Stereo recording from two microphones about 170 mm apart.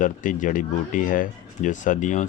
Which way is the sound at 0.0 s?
50° left (ahead or behind).